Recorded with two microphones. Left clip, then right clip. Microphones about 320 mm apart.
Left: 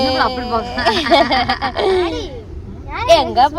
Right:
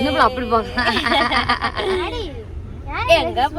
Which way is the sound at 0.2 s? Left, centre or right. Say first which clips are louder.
Right 1 dB; centre.